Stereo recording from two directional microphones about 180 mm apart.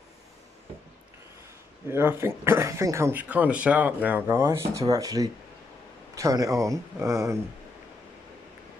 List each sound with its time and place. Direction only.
1.9 s speech: 15° right (ahead or behind)